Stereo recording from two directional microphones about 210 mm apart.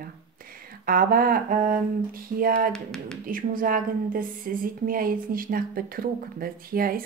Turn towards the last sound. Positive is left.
turn(degrees=-45)  # may be behind; listen again after turning